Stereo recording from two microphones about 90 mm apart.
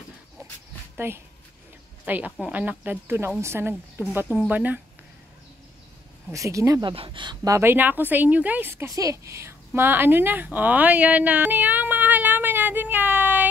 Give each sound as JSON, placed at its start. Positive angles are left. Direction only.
{"t": 0.9, "sound": "a woman's voice", "side_deg": -25}
{"t": 6.3, "sound": "a woman's voice", "side_deg": -35}
{"t": 6.8, "sound": "speech", "side_deg": -65}
{"t": 7.6, "sound": "speech", "side_deg": -20}
{"t": 8.9, "sound": "a woman's voice", "side_deg": -35}
{"t": 9.8, "sound": "a sound", "side_deg": -25}